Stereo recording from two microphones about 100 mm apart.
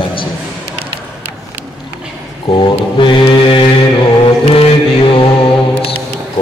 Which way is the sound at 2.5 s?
55° left (ahead or behind).